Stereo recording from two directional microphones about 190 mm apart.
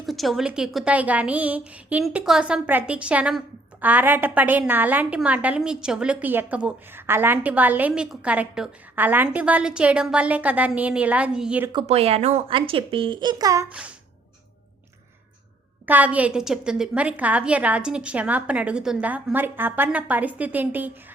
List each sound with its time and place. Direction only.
0.0 s a woman's voice: centre (ahead or behind)
11.7 s a child's voice: 30° right (ahead or behind)
13.7 s a woman's voice: 5° right (ahead or behind)
15.9 s a woman's voice: 10° right (ahead or behind)